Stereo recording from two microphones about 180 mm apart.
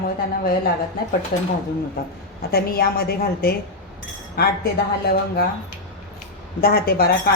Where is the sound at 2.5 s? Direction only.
60° left (ahead or behind).